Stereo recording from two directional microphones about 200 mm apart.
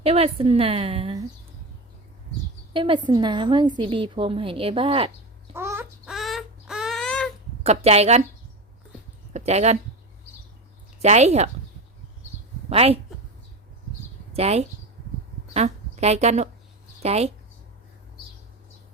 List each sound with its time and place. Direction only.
0.0 s a woman's voice: 30° right (ahead or behind)
2.7 s a woman's voice: 25° right (ahead or behind)
5.5 s a sound: 10° right (ahead or behind)
7.6 s a woman's voice: 30° right (ahead or behind)
9.3 s speech: 35° right (ahead or behind)
11.0 s a woman's voice: 35° right (ahead or behind)
12.6 s a woman's voice: 30° right (ahead or behind)
14.3 s a woman's voice: 30° right (ahead or behind)